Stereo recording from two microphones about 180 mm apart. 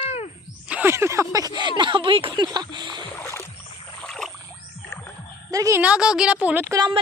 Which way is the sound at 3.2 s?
15° left (ahead or behind).